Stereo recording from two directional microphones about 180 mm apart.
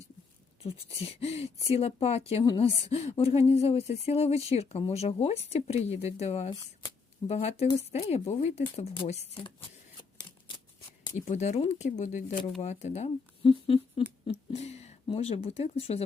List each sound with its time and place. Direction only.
0.6 s speech: 30° left (ahead or behind)
11.3 s speech: 35° left (ahead or behind)
14.3 s a sound: 35° left (ahead or behind)
15.0 s speech: 35° left (ahead or behind)